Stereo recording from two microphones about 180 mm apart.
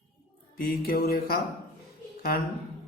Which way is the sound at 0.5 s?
55° left (ahead or behind).